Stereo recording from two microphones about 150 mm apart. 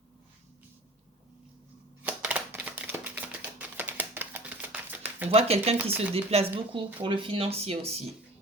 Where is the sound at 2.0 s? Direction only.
10° right (ahead or behind).